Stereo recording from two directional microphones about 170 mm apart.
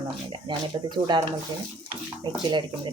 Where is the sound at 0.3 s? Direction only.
30° right (ahead or behind).